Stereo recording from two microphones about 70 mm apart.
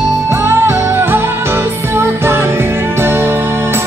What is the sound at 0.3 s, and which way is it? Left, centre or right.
Music, right.